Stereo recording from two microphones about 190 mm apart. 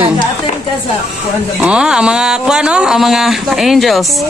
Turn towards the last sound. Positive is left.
turn(degrees=0)  # may be behind; listen again after turning